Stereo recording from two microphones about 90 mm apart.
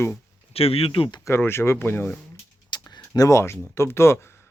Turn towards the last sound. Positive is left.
turn(degrees=30)  # may be behind; listen again after turning